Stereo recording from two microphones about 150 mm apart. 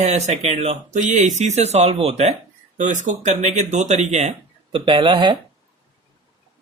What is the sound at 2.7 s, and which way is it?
Speech, 55° right (ahead or behind).